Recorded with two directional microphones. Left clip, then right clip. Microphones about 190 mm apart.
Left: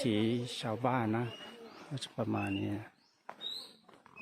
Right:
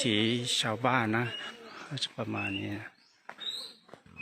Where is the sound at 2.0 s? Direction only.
20° left (ahead or behind).